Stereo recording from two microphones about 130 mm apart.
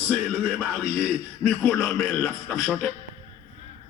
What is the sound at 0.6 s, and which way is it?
Speech, centre (ahead or behind).